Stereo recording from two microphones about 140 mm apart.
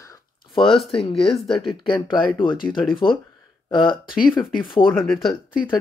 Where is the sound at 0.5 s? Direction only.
40° left (ahead or behind).